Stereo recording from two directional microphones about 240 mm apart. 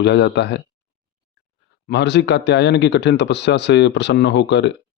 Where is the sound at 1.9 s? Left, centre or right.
Left.